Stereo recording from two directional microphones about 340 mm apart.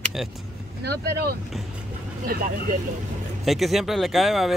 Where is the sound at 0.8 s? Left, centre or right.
Right.